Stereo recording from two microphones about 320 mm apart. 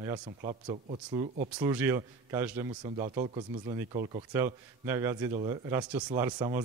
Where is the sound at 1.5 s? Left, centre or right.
Centre.